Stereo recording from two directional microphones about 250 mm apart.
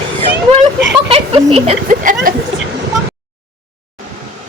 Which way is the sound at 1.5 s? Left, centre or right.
Right.